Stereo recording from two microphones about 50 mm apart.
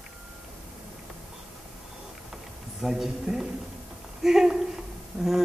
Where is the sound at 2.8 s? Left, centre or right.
Centre.